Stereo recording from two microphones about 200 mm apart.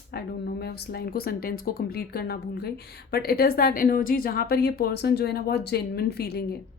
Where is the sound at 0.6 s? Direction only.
55° left (ahead or behind).